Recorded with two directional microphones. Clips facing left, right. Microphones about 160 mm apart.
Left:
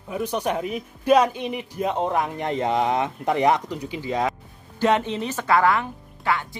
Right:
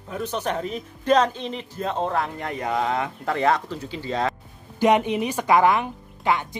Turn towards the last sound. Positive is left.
turn(degrees=-20)  # may be behind; listen again after turning